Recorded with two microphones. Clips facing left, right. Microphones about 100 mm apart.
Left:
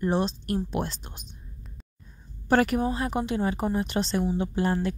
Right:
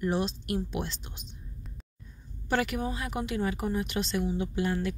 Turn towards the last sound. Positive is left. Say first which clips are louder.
# left 4 dB
turn(degrees=35)  # may be behind; listen again after turning